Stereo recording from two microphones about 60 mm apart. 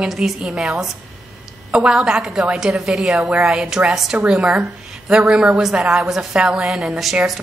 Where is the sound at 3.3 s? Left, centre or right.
Centre.